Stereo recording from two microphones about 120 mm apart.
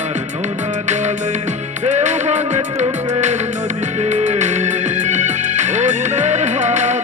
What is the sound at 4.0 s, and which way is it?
Music, 75° right (ahead or behind).